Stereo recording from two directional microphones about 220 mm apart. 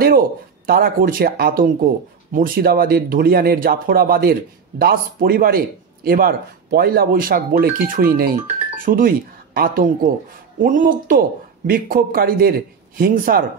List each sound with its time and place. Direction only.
0.7 s speech: 40° right (ahead or behind)